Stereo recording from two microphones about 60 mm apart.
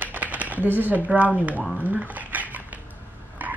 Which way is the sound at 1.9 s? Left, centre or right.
Right.